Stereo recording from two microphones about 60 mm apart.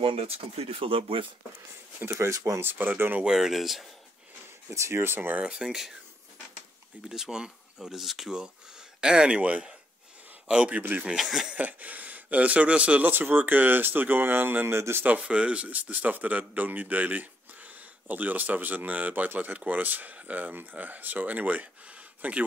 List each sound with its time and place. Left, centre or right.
2.0 s speech: right
2.3 s speech: right
2.6 s speech: right
3.3 s speech: centre
4.6 s speech: right
5.4 s speech: centre
7.1 s speech: centre
10.8 s speech: right
11.1 s speech: centre
11.5 s speech: right
15.0 s speech: right